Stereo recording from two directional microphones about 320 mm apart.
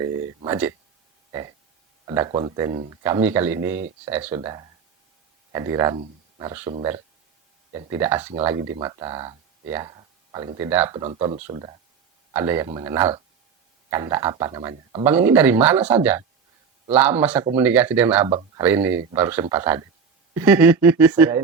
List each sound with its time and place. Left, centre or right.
0.4 s speech: centre
2.0 s speech: centre